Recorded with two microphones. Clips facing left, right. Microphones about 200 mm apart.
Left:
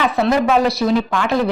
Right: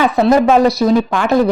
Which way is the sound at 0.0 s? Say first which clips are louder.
Right 5 dB; 45° right (ahead or behind).